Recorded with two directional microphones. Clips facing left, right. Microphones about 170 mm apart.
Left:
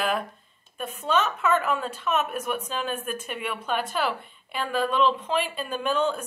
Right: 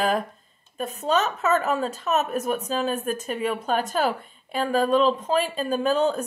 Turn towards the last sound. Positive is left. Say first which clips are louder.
# right 4 dB
turn(degrees=-40)  # may be behind; listen again after turning